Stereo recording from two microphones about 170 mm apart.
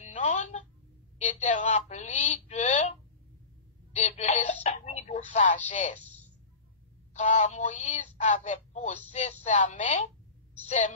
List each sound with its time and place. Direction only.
0.0 s telephone: 45° left (ahead or behind)
1.1 s speech: 45° left (ahead or behind)
7.2 s speech: 45° left (ahead or behind)